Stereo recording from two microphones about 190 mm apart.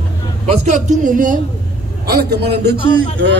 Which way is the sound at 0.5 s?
35° right (ahead or behind).